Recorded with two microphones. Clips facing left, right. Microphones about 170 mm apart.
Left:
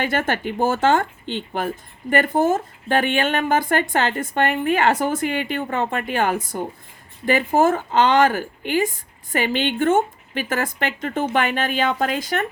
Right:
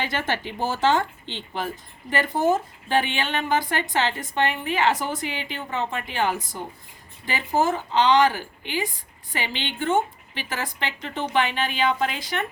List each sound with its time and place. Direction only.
0.0 s speech: 50° left (ahead or behind)